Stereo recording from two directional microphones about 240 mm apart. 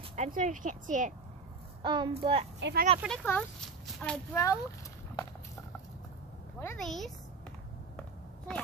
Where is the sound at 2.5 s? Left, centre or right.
Right.